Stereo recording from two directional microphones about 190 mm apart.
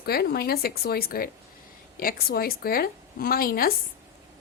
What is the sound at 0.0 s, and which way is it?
A woman's voice, 55° left (ahead or behind).